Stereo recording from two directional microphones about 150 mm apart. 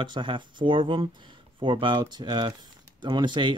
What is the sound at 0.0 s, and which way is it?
Speech, 30° right (ahead or behind).